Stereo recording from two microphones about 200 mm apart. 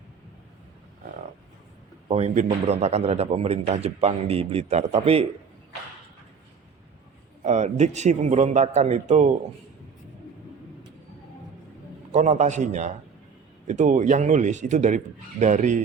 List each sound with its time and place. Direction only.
2.0 s a man's voice: 30° right (ahead or behind)
7.4 s a man's voice: 35° right (ahead or behind)
12.1 s a man's voice: 35° right (ahead or behind)